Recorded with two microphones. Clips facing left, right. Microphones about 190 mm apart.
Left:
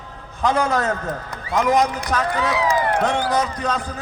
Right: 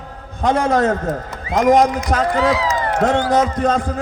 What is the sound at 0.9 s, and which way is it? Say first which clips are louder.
A man's voice: right 5 dB; 45° right (ahead or behind).